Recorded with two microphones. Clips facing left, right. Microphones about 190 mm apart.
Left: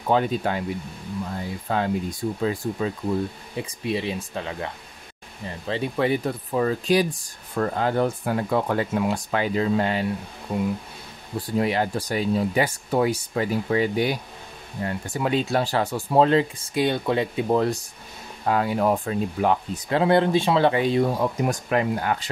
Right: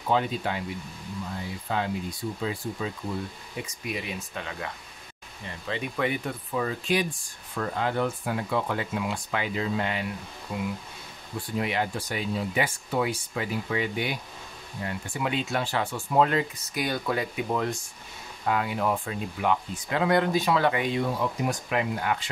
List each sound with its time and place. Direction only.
0.1 s speech: 45° left (ahead or behind)
1.7 s speech: 45° left (ahead or behind)
3.5 s speech: 30° left (ahead or behind)
5.7 s speech: 30° left (ahead or behind)